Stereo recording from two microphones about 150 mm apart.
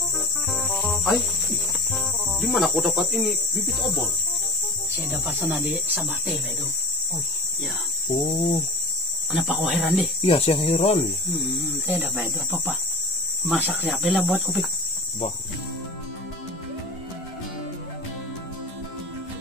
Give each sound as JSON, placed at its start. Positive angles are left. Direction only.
{"t": 0.5, "sound": "cricket", "side_deg": 0}
{"t": 5.6, "sound": "speech", "side_deg": -10}
{"t": 8.3, "sound": "speech", "side_deg": 40}
{"t": 9.3, "sound": "speech", "side_deg": -5}
{"t": 10.2, "sound": "speech", "side_deg": 40}
{"t": 11.7, "sound": "speech", "side_deg": -10}